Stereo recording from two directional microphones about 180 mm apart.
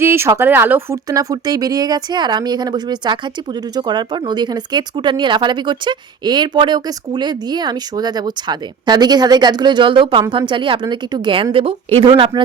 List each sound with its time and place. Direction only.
0.0 s speech: 15° right (ahead or behind)